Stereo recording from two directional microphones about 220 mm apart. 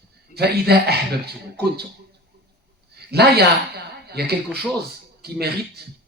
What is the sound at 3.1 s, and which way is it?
Speech, 45° right (ahead or behind).